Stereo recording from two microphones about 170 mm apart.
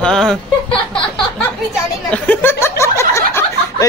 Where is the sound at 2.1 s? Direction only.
10° left (ahead or behind).